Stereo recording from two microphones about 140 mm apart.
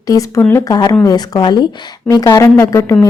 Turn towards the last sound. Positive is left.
turn(degrees=20)  # may be behind; listen again after turning